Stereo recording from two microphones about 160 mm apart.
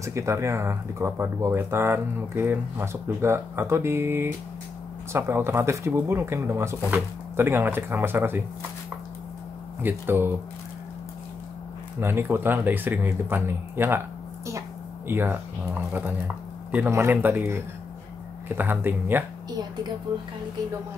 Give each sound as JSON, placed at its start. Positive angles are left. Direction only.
{"t": 0.0, "sound": "speech", "side_deg": -20}
{"t": 9.8, "sound": "speech", "side_deg": -15}
{"t": 12.0, "sound": "speech", "side_deg": -15}
{"t": 20.1, "sound": "speech", "side_deg": -25}